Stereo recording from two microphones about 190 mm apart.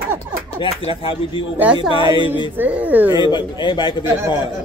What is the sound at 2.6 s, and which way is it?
Speech, 10° right (ahead or behind).